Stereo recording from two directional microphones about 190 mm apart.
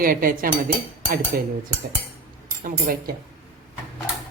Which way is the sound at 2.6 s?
50° right (ahead or behind).